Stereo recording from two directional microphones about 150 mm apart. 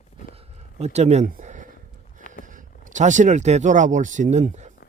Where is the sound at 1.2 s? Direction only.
60° right (ahead or behind).